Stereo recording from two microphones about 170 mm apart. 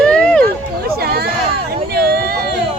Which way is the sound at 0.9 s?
65° right (ahead or behind).